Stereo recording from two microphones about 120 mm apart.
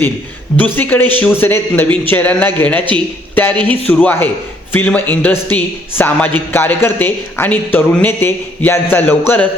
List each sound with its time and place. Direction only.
0.5 s speech: 15° left (ahead or behind)